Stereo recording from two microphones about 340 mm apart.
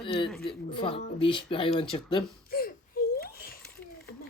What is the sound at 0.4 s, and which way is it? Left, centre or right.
Speech, centre.